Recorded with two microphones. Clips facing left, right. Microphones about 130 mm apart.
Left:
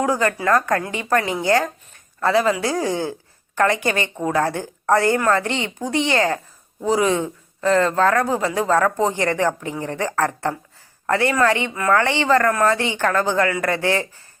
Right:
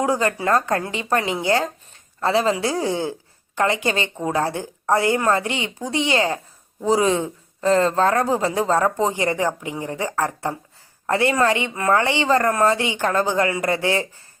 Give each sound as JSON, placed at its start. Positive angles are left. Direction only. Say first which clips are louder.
{"t": 0.0, "sound": "speech", "louder": "left 1 dB", "side_deg": -25}